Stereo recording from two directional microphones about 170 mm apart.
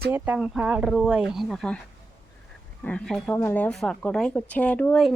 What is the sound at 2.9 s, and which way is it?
Speech, 5° left (ahead or behind).